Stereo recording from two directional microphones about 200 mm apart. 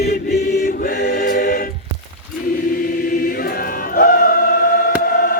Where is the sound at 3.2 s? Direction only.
45° left (ahead or behind).